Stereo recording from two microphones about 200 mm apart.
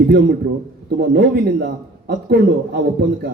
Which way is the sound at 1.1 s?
55° right (ahead or behind).